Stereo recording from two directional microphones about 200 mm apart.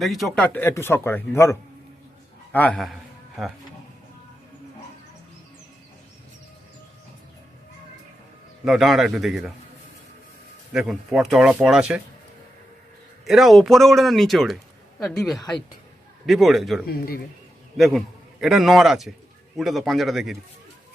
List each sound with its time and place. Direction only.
0.0 s a man's voice: centre (ahead or behind)
8.6 s speech: centre (ahead or behind)
10.7 s speech: centre (ahead or behind)
13.2 s speech: centre (ahead or behind)
16.8 s speech: 50° left (ahead or behind)
17.7 s a man's voice: centre (ahead or behind)